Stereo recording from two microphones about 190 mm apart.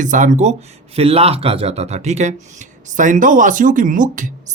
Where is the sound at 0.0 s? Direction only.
40° right (ahead or behind).